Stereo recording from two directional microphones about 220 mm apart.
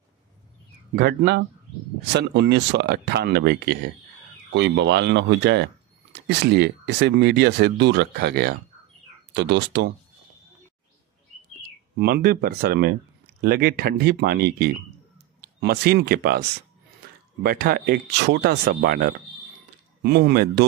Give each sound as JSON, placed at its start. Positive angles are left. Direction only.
{"t": 0.9, "sound": "speech", "side_deg": -50}
{"t": 12.0, "sound": "speech", "side_deg": -45}